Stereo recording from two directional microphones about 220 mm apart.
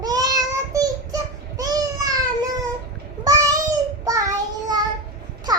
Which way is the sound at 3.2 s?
15° right (ahead or behind).